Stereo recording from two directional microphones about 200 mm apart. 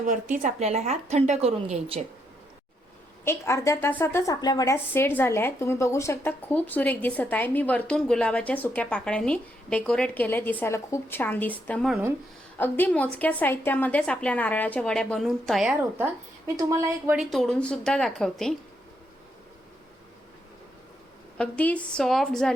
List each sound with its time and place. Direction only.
0.0 s a woman's voice: 40° right (ahead or behind)
3.2 s a woman's voice: 15° left (ahead or behind)
16.6 s speech: 15° right (ahead or behind)
17.2 s a woman's voice: centre (ahead or behind)
21.3 s a woman's voice: 5° left (ahead or behind)